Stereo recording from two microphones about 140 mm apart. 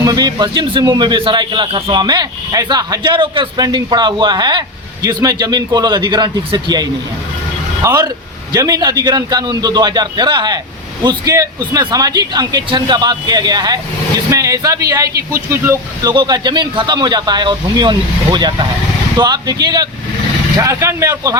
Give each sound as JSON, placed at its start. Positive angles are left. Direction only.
{"t": 0.0, "sound": "a man's voice", "side_deg": -30}
{"t": 7.8, "sound": "speech", "side_deg": -20}
{"t": 16.1, "sound": "a man's voice", "side_deg": -30}